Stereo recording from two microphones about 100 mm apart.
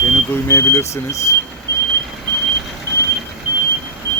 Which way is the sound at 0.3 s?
25° left (ahead or behind).